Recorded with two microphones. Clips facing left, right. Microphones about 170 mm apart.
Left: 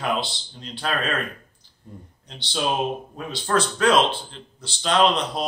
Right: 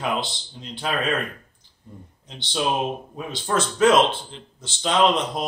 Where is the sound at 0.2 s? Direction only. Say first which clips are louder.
Even; 15° right (ahead or behind).